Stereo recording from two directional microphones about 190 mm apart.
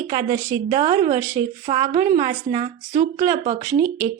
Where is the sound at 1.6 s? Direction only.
40° right (ahead or behind).